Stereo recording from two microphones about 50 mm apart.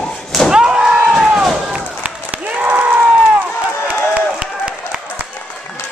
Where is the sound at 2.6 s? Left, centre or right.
Right.